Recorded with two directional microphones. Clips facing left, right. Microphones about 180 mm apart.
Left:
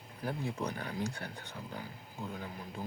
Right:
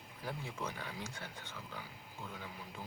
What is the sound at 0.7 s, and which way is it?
Speech, 45° left (ahead or behind).